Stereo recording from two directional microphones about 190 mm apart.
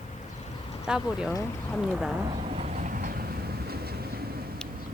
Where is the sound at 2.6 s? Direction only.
40° right (ahead or behind); by 4.3 s 55° right (ahead or behind).